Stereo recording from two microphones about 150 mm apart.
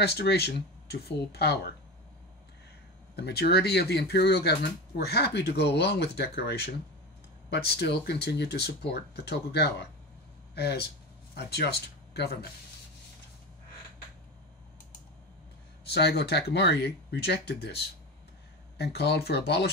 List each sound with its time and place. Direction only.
0.0 s speech: 90° left
3.2 s speech: 90° left
15.8 s speech: 90° left